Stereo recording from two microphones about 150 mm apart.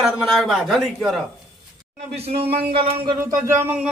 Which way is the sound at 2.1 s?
40° right (ahead or behind).